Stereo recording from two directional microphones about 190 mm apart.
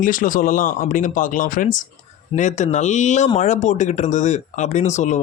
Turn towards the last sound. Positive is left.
turn(degrees=40)  # may be behind; listen again after turning